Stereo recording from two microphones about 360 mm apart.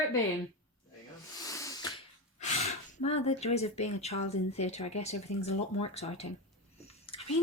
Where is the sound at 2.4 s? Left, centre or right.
Centre.